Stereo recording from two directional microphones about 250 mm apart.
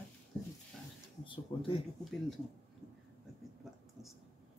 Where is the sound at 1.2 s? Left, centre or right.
Centre.